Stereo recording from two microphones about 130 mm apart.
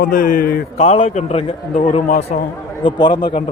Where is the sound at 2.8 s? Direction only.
35° left (ahead or behind).